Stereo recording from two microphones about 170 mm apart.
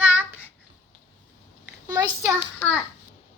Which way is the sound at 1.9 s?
20° right (ahead or behind).